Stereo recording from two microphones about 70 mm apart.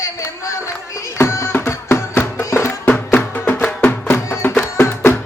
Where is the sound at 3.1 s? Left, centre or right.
Left.